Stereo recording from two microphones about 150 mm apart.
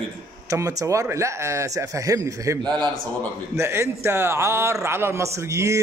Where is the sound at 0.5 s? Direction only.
20° right (ahead or behind).